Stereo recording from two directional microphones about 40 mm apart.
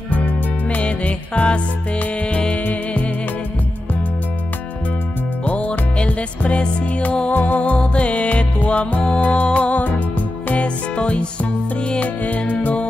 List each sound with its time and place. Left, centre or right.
0.7 s music: left
5.4 s music: left
7.3 s music: left
7.6 s music: left
12.0 s music: left